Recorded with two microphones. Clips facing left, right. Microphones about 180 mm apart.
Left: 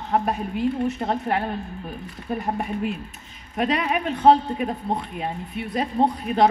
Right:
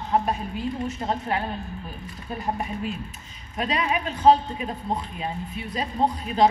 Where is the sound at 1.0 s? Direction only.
55° left (ahead or behind).